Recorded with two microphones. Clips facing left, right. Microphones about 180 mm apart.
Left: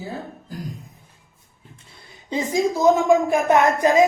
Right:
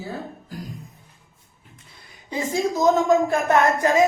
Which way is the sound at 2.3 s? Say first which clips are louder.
Left 2 dB; 15° left (ahead or behind).